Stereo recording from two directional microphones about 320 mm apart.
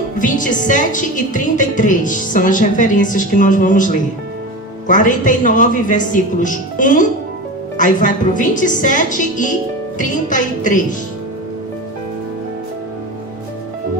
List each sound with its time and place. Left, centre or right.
0.2 s a woman's voice: left